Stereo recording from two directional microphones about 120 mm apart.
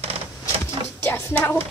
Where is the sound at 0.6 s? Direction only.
20° left (ahead or behind).